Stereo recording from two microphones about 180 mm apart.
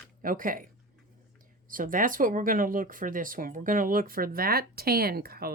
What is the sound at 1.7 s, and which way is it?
Speech, 50° right (ahead or behind).